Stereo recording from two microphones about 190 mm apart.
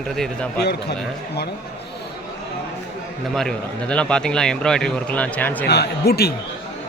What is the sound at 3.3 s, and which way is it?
A man's voice, 5° left (ahead or behind).